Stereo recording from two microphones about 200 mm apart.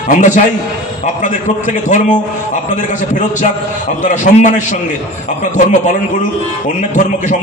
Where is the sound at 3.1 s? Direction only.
40° left (ahead or behind).